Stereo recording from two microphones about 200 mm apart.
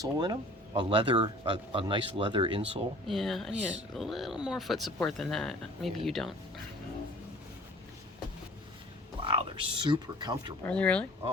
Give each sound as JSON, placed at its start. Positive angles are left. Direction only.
{"t": 0.0, "sound": "speech", "side_deg": -20}
{"t": 3.1, "sound": "speech", "side_deg": 0}
{"t": 9.2, "sound": "speech", "side_deg": -25}
{"t": 10.7, "sound": "speech", "side_deg": 5}